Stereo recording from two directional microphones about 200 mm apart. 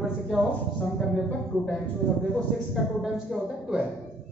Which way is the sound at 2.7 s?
Centre (ahead or behind).